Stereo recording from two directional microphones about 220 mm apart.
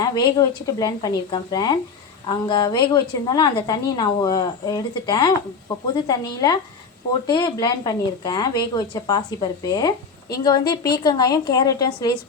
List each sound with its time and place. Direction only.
0.0 s speech: 20° left (ahead or behind)